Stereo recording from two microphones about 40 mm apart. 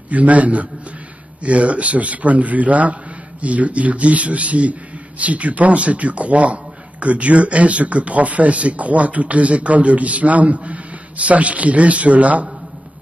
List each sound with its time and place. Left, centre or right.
0.1 s speech: right